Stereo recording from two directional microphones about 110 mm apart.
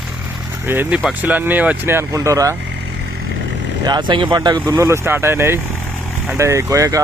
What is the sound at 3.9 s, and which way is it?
Speech, 45° right (ahead or behind).